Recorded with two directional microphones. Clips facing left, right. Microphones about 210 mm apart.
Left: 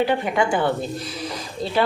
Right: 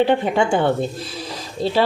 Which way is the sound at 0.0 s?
25° right (ahead or behind).